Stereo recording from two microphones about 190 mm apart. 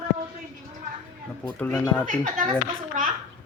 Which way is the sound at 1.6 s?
10° left (ahead or behind).